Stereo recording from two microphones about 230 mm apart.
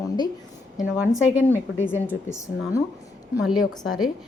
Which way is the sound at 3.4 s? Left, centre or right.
Centre.